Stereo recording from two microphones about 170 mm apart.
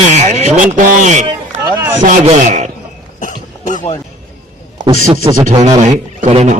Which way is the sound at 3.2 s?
50° left (ahead or behind).